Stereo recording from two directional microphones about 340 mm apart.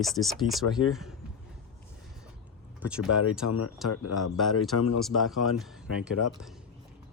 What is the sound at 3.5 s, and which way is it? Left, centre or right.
Speech, left.